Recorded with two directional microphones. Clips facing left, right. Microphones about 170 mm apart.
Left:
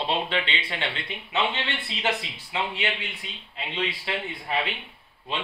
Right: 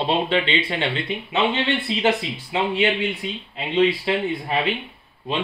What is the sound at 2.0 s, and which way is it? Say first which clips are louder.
Speech: right 6 dB; 25° right (ahead or behind).